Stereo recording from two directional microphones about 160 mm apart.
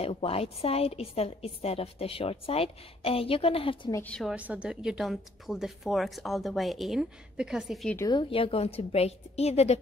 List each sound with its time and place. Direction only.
0.0 s a woman's voice: 40° left (ahead or behind)
3.9 s a woman's voice: 10° left (ahead or behind)
8.1 s a woman's voice: 35° left (ahead or behind)